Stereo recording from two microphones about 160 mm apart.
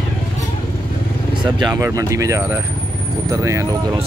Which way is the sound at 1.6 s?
20° right (ahead or behind).